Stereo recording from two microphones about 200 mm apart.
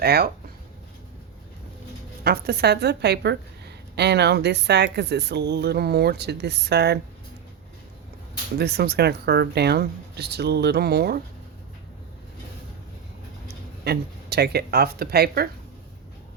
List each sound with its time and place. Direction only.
0.0 s speech: 50° right (ahead or behind)
2.2 s speech: 50° right (ahead or behind)
8.5 s speech: 55° right (ahead or behind)
13.8 s speech: 55° right (ahead or behind)